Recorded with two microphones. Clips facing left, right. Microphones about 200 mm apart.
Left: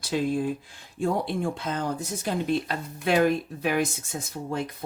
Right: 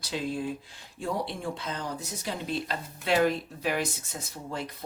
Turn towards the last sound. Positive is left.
turn(degrees=50)  # may be behind; listen again after turning